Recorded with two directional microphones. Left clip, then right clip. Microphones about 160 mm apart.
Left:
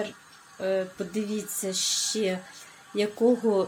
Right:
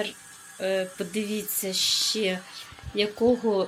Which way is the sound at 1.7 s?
20° left (ahead or behind).